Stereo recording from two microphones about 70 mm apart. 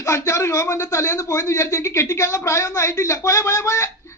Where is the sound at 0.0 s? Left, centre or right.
Left.